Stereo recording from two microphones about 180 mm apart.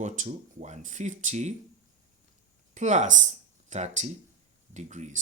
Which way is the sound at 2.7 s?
40° right (ahead or behind).